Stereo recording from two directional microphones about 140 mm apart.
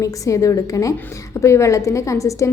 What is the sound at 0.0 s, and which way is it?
A woman's voice, 25° left (ahead or behind).